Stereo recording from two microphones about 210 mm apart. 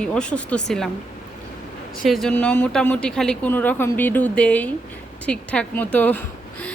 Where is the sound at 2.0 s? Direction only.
Centre (ahead or behind).